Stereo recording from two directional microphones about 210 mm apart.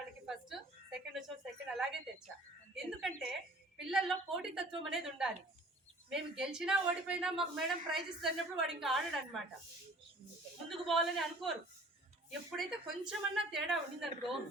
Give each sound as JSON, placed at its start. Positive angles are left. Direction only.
{"t": 0.3, "sound": "a sound", "side_deg": 0}
{"t": 1.6, "sound": "a woman's voice", "side_deg": 0}
{"t": 10.7, "sound": "a woman's voice", "side_deg": 0}